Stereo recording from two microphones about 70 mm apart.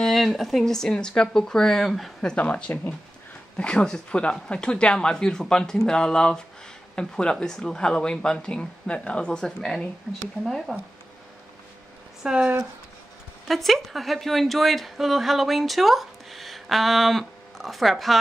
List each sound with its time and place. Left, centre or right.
0.0 s a woman's voice: centre
2.2 s a woman's voice: centre
12.2 s speech: centre
13.5 s a woman's voice: centre